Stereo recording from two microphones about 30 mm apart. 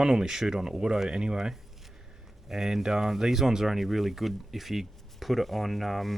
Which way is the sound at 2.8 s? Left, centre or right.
Centre.